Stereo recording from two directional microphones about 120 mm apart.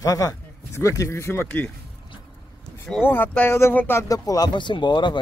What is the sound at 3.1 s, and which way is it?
Speech, 15° left (ahead or behind).